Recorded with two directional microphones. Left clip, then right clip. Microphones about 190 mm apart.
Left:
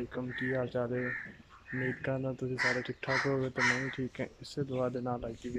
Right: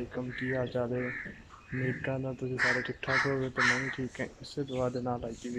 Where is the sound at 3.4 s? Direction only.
30° left (ahead or behind).